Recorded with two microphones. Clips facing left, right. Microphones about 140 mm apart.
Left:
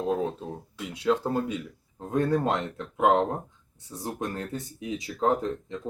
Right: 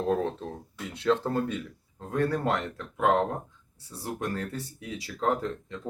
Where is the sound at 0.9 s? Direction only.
10° left (ahead or behind).